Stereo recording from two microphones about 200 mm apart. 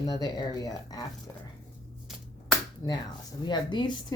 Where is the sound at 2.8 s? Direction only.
15° left (ahead or behind).